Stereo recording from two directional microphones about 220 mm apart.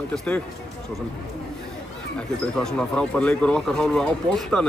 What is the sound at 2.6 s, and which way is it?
Speech, 5° left (ahead or behind).